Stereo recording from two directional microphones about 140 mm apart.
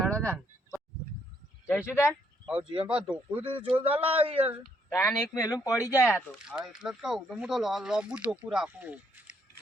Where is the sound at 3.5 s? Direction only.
40° right (ahead or behind).